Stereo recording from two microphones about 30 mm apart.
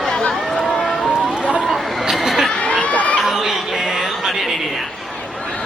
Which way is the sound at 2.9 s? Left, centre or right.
Left.